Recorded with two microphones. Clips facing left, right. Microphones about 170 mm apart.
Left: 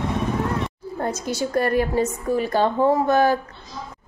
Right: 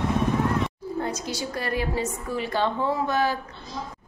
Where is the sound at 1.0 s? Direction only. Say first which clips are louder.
Left 5 dB; 50° left (ahead or behind).